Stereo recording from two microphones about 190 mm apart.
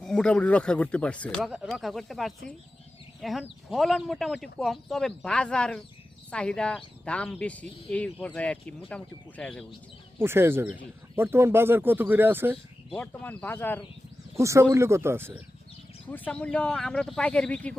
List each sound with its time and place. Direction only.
0.0 s speech: 5° left (ahead or behind)
10.2 s speech: 10° right (ahead or behind)
12.9 s speech: 5° left (ahead or behind)
14.3 s speech: 15° right (ahead or behind)
16.0 s speech: 10° left (ahead or behind)